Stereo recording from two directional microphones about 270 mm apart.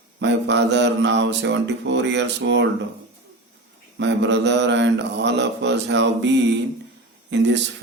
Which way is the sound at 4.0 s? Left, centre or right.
Right.